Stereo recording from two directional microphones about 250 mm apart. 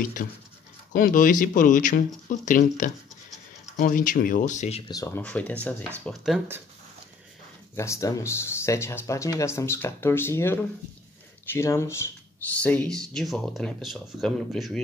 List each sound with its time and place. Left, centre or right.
0.2 s speech: left; by 6.6 s centre
7.7 s speech: centre